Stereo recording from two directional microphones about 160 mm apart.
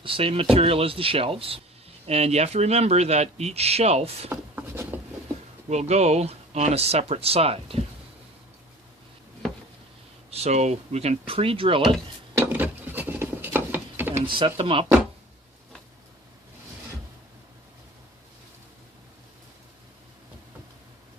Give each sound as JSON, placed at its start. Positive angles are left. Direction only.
{"t": 0.0, "sound": "speech", "side_deg": -35}
{"t": 4.3, "sound": "rub", "side_deg": -15}
{"t": 5.6, "sound": "speech", "side_deg": -45}
{"t": 10.3, "sound": "speech", "side_deg": -40}
{"t": 12.3, "sound": "a sound", "side_deg": -15}
{"t": 14.3, "sound": "speech", "side_deg": -30}